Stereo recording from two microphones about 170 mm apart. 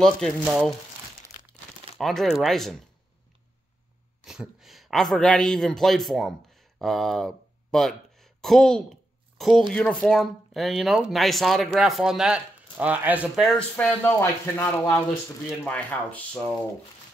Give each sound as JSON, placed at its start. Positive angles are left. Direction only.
{"t": 0.0, "sound": "speech", "side_deg": 0}
{"t": 2.0, "sound": "speech", "side_deg": 0}
{"t": 4.2, "sound": "a man's voice", "side_deg": 0}
{"t": 13.6, "sound": "speech", "side_deg": 10}